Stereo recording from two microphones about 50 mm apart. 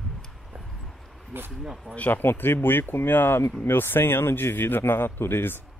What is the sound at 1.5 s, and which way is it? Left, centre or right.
Speech, centre.